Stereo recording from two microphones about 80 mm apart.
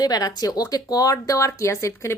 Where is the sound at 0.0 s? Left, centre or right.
Left.